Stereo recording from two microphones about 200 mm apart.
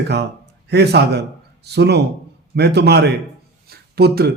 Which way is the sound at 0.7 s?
55° right (ahead or behind).